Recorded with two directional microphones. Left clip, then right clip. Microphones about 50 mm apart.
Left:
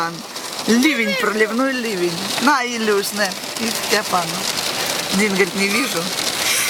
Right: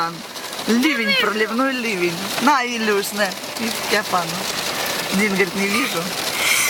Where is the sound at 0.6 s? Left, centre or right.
Left.